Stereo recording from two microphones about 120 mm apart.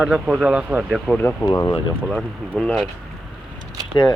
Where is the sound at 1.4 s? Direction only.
30° left (ahead or behind).